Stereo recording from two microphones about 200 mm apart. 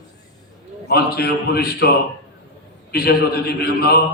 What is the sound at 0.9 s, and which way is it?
A man's voice, 50° left (ahead or behind).